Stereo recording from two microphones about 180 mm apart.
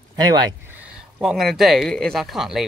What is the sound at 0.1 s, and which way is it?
Speech, 20° right (ahead or behind).